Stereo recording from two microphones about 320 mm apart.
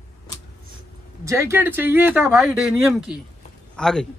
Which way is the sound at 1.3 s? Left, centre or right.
Centre.